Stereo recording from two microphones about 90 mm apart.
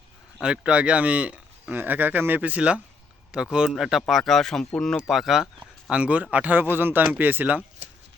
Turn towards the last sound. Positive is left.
turn(degrees=-20)  # may be behind; listen again after turning